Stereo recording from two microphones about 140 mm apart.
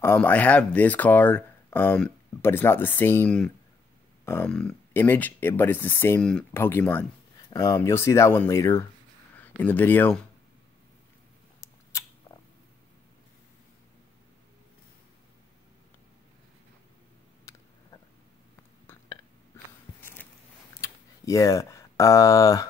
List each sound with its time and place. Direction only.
0.0 s speech: 15° left (ahead or behind)
20.0 s a sound: 15° left (ahead or behind)
20.8 s speech: 25° left (ahead or behind)